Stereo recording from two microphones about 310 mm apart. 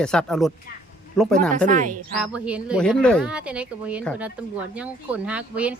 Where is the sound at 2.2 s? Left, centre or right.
Centre.